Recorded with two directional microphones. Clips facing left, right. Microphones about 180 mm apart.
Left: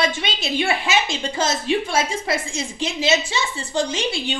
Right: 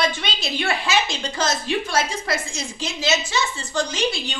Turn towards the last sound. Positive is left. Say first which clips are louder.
# left 2 dB
turn(degrees=30)  # may be behind; listen again after turning